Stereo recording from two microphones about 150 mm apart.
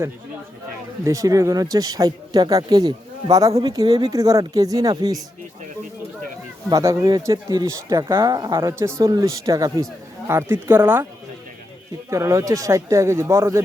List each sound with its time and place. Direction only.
1.0 s speech: 25° right (ahead or behind)
6.7 s speech: 25° right (ahead or behind)
12.1 s speech: 20° right (ahead or behind)